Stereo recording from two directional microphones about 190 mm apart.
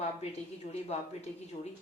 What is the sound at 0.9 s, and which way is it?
Speech, 35° left (ahead or behind).